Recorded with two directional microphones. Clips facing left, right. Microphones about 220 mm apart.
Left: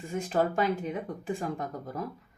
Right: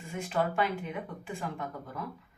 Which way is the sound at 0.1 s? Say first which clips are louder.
Left 3 dB; 40° left (ahead or behind).